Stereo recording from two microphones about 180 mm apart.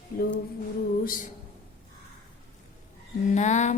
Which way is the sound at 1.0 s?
50° left (ahead or behind).